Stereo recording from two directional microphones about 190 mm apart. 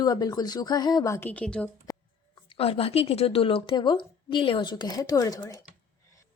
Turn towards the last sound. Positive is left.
turn(degrees=15)  # may be behind; listen again after turning